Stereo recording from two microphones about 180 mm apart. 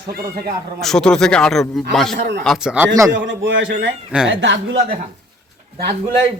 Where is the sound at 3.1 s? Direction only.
90° right.